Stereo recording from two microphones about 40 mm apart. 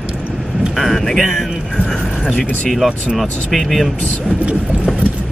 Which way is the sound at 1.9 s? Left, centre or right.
Centre.